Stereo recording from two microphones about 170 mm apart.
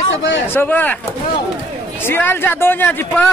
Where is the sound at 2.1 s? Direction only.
10° left (ahead or behind).